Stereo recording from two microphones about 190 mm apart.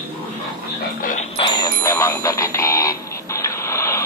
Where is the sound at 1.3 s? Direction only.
20° left (ahead or behind).